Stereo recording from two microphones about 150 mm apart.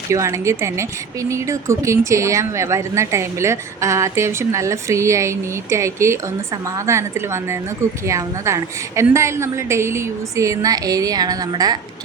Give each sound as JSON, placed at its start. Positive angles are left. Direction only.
{"t": 0.1, "sound": "speech", "side_deg": -20}
{"t": 8.0, "sound": "speech", "side_deg": -20}